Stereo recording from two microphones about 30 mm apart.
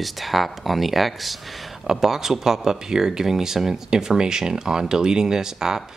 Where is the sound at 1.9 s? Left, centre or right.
Centre.